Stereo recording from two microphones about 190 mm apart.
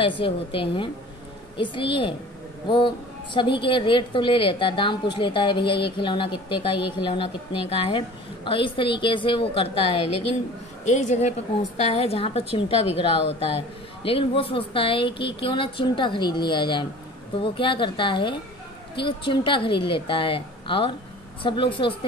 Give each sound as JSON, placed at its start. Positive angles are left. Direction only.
{"t": 0.0, "sound": "a woman's voice", "side_deg": 30}
{"t": 3.3, "sound": "a woman's voice", "side_deg": 25}